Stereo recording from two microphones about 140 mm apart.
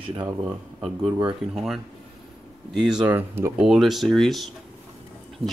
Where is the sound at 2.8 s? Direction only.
10° right (ahead or behind).